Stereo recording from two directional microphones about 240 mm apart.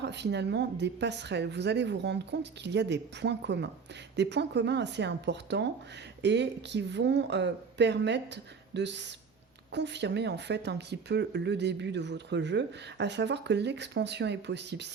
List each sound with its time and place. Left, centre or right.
0.0 s speech: right